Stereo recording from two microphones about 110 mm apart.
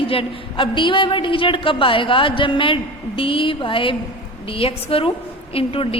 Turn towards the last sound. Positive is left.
turn(degrees=60)  # may be behind; listen again after turning